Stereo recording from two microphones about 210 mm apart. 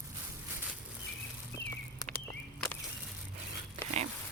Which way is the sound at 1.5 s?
10° left (ahead or behind).